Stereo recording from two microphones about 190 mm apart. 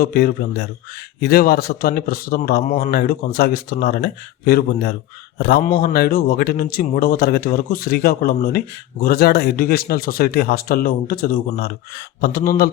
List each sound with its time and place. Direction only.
0.0 s speech: 50° left (ahead or behind)
2.6 s speech: 40° left (ahead or behind)
2.9 s speech: 55° left (ahead or behind)